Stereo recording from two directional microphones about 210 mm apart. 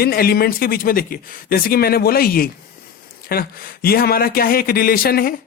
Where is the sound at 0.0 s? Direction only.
45° left (ahead or behind).